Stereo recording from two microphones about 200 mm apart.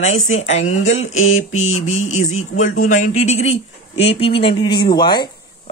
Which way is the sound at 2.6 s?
90° left.